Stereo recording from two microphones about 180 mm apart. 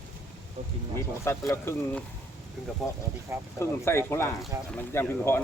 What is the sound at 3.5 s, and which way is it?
Speech, 15° left (ahead or behind).